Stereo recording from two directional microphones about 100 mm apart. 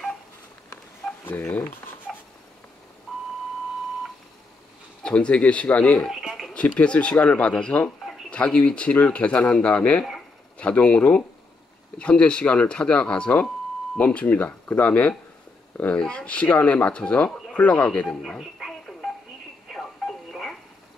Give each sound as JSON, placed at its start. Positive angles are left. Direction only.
{"t": 1.0, "sound": "telephone dialing", "side_deg": 0}
{"t": 1.8, "sound": "dog", "side_deg": 20}
{"t": 3.1, "sound": "beep", "side_deg": 0}
{"t": 5.0, "sound": "speech", "side_deg": 10}
{"t": 6.0, "sound": "a sound", "side_deg": 0}
{"t": 6.5, "sound": "speech", "side_deg": 10}
{"t": 18.2, "sound": "telephone", "side_deg": 0}
{"t": 19.7, "sound": "alarm clock", "side_deg": 0}